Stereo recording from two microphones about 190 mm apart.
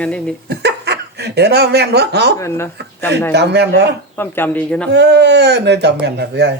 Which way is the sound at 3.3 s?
60° right (ahead or behind).